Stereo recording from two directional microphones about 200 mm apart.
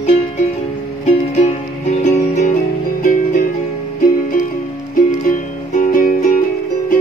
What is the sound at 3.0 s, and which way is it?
Music, 45° left (ahead or behind).